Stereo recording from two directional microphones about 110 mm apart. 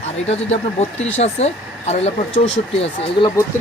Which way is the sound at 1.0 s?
85° left.